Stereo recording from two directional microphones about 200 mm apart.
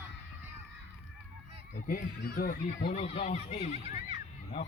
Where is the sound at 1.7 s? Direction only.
45° left (ahead or behind).